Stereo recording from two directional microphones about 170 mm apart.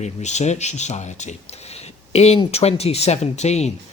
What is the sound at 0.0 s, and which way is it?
Speech, 40° left (ahead or behind).